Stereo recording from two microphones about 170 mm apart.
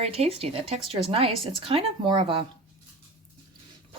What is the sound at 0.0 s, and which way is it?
Speech, 35° right (ahead or behind).